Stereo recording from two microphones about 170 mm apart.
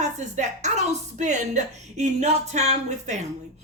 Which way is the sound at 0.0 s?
45° right (ahead or behind).